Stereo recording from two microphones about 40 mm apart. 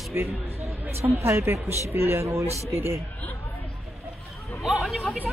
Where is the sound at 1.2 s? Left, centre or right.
Right.